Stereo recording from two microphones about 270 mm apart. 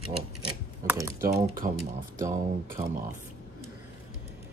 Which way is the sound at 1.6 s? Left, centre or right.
Right.